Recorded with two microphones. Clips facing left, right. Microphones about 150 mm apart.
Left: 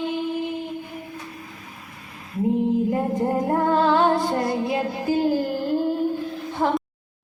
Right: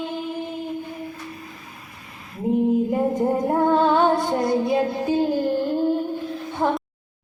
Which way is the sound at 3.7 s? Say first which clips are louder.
Right 1 dB; 20° right (ahead or behind).